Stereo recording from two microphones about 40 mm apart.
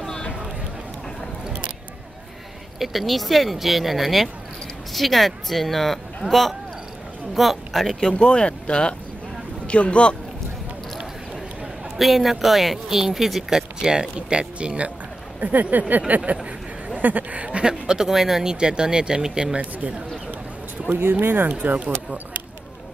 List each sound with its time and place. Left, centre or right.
2.8 s speech: centre
8.2 s speech: left
12.0 s speech: centre; by 14.8 s right
15.4 s speech: right
17.4 s speech: right
21.1 s speech: right
21.5 s speech: right